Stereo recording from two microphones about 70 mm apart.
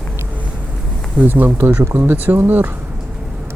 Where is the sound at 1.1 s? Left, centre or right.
Right.